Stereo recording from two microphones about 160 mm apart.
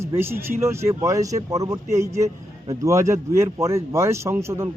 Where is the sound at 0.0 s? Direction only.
15° right (ahead or behind).